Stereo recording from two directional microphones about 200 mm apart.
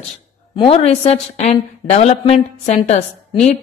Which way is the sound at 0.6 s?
30° left (ahead or behind).